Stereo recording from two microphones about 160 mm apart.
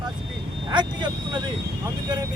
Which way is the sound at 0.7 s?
30° right (ahead or behind).